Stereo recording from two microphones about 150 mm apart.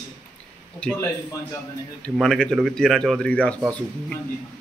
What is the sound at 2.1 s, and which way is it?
Speech, 5° left (ahead or behind).